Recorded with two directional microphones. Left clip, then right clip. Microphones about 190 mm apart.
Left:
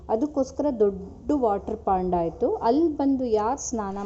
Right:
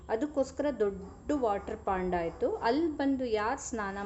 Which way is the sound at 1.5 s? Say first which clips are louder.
Left 8 dB; 15° left (ahead or behind).